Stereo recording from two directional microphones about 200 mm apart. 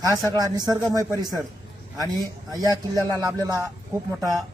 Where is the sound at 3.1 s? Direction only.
15° right (ahead or behind).